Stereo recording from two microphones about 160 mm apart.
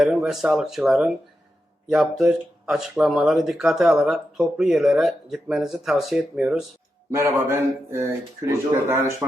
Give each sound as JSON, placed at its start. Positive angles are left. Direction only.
{"t": 0.0, "sound": "speech", "side_deg": -5}
{"t": 7.1, "sound": "speech", "side_deg": -20}